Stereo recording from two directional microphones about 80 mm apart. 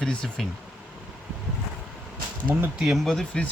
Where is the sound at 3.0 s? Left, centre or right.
Centre.